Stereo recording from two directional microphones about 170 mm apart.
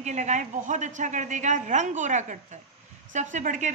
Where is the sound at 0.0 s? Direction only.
45° right (ahead or behind).